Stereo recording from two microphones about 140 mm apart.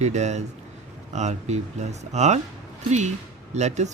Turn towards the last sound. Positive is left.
turn(degrees=-55)  # may be behind; listen again after turning